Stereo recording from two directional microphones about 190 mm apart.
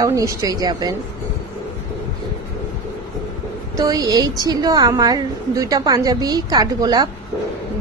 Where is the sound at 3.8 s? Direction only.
20° right (ahead or behind).